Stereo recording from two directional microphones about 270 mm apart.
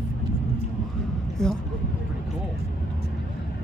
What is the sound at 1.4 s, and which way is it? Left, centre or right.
Speech, centre.